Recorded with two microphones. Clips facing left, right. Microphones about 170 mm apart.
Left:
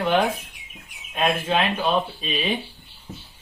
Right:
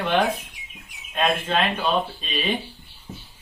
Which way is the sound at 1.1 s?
5° left (ahead or behind).